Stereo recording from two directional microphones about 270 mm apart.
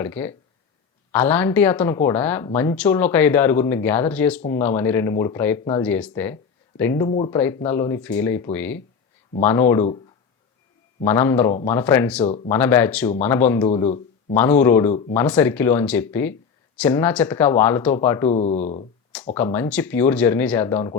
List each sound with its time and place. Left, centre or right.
0.0 s speech: centre
11.0 s speech: centre
12.2 s speech: left
12.5 s speech: centre
13.7 s speech: left
14.3 s speech: centre
18.3 s speech: left
19.2 s speech: centre